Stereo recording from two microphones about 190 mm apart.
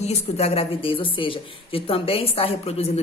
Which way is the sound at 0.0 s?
35° left (ahead or behind).